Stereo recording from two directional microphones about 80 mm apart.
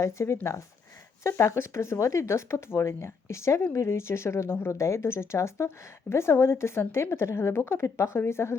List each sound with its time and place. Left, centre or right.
0.0 s speech: left